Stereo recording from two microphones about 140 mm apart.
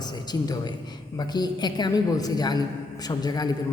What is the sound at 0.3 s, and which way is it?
A man's voice, 30° left (ahead or behind).